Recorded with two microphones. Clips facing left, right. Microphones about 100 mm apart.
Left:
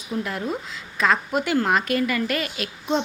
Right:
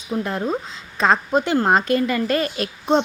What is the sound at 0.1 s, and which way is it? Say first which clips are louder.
A woman's voice: right 4 dB; 30° right (ahead or behind).